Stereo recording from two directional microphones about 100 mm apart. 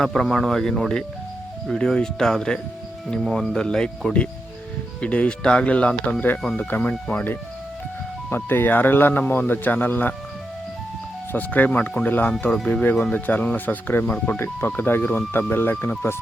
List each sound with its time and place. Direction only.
0.0 s speech: 5° left (ahead or behind)
8.4 s speech: 20° left (ahead or behind)
11.3 s speech: 15° left (ahead or behind)